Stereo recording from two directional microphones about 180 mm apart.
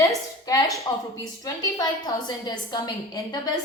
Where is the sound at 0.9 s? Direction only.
25° left (ahead or behind).